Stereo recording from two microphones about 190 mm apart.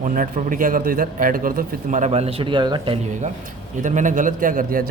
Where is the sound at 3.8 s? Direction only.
40° right (ahead or behind).